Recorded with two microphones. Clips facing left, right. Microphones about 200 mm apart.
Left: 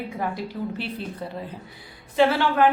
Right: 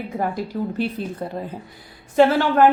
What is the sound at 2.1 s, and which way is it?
Speech, 45° right (ahead or behind).